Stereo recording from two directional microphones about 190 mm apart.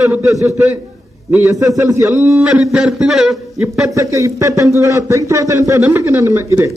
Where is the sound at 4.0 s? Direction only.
15° right (ahead or behind).